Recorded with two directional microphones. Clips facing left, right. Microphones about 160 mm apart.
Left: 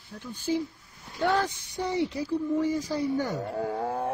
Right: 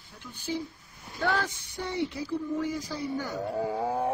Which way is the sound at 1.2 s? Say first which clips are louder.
Left 3 dB; 20° left (ahead or behind).